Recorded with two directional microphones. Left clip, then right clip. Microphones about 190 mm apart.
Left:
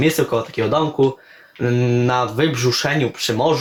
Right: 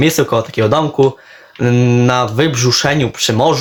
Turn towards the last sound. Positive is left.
turn(degrees=-40)  # may be behind; listen again after turning